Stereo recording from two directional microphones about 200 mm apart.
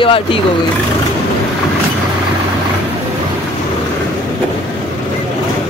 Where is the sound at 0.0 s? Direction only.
25° left (ahead or behind).